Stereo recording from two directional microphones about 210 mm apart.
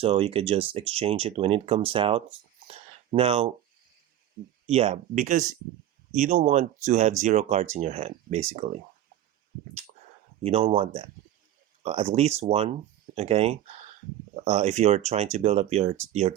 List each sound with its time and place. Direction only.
0.0 s speech: 25° right (ahead or behind)
2.6 s a sound: 25° right (ahead or behind)
4.6 s speech: 30° right (ahead or behind)
10.4 s speech: 30° right (ahead or behind)